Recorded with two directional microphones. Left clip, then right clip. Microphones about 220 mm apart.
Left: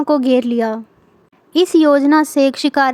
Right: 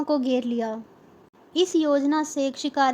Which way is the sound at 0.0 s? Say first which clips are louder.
Left 10 dB; 25° left (ahead or behind).